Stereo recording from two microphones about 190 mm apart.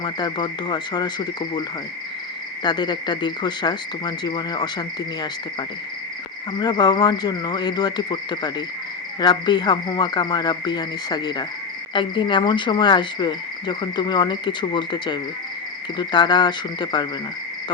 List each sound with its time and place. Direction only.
0.0 s cricket: 20° left (ahead or behind)
2.6 s cricket: 25° left (ahead or behind)